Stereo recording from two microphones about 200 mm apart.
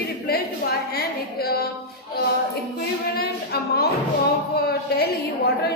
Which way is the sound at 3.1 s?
50° left (ahead or behind).